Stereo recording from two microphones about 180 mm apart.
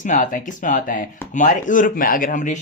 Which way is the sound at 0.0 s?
45° left (ahead or behind).